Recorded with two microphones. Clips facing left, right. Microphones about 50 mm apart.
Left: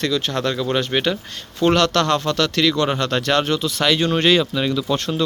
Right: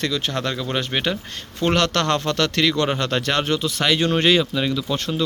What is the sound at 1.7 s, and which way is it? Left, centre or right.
Speech, right.